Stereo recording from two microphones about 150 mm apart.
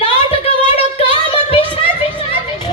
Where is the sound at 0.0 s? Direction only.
40° left (ahead or behind).